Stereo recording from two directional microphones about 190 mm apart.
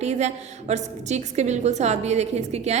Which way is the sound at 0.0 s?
35° right (ahead or behind).